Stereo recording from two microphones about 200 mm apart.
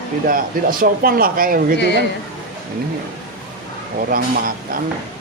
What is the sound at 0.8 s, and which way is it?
Speech, 45° right (ahead or behind).